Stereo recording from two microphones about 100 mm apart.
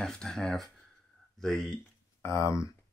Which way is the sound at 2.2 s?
30° left (ahead or behind).